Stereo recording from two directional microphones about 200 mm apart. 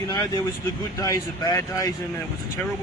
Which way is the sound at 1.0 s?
15° left (ahead or behind).